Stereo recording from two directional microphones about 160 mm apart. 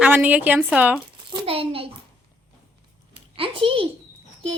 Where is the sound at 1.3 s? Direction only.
30° right (ahead or behind).